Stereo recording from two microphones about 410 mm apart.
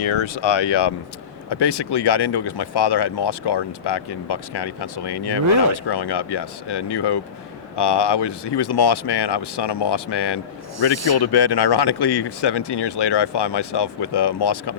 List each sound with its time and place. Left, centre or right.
0.2 s speech: left